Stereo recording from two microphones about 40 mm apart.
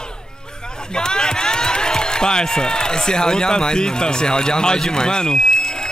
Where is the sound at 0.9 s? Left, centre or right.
Centre.